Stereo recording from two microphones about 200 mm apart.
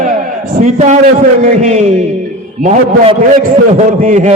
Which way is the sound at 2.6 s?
30° right (ahead or behind).